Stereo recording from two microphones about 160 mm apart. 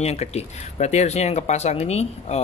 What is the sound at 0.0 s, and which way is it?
Speech, 40° left (ahead or behind).